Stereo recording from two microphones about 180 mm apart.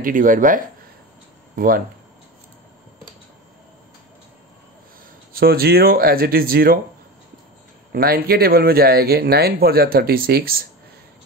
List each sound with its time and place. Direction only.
0.0 s speech: 50° right (ahead or behind)
5.3 s speech: 60° right (ahead or behind)
7.9 s speech: 60° right (ahead or behind)